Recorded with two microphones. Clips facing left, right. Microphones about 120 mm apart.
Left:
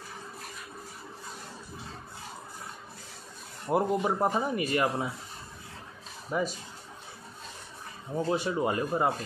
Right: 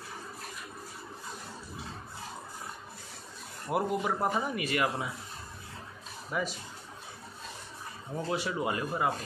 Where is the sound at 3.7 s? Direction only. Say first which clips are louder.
Left 3 dB; 15° left (ahead or behind); by 5.1 s 30° left (ahead or behind).